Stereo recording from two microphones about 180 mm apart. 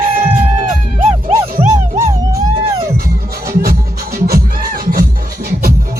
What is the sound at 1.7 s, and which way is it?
Music, 15° right (ahead or behind).